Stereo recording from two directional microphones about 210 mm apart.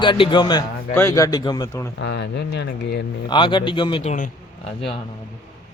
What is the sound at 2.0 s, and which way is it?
Speech, 55° left (ahead or behind).